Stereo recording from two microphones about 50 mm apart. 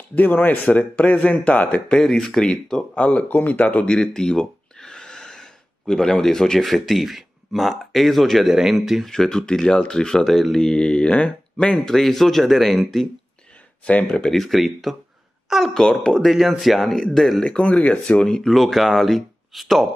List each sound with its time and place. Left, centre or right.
0.1 s speech: left
2.0 s speech: centre; by 3.9 s left
3.9 s speech: centre
9.1 s speech: centre
11.7 s speech: centre
14.0 s speech: centre
14.4 s speech: centre
15.7 s speech: centre
17.5 s speech: left
18.0 s speech: centre